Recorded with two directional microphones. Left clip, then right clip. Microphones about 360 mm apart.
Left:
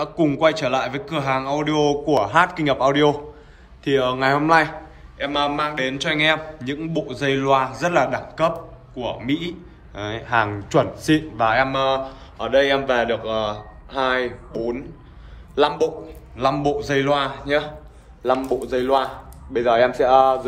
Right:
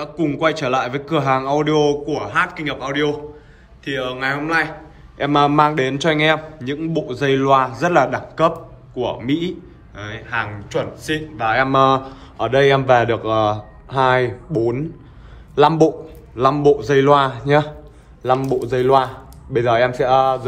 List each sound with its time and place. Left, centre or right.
0.0 s a man's voice: centre
5.1 s a man's voice: centre